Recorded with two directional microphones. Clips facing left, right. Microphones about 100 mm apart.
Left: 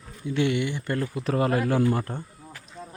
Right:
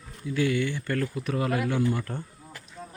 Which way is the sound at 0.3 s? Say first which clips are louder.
Left 1 dB; 25° left (ahead or behind).